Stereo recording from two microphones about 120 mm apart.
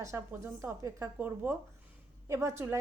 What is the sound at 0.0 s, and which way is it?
A woman's voice, 25° right (ahead or behind).